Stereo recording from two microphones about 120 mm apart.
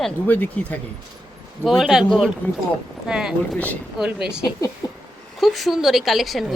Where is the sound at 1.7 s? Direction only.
Centre (ahead or behind).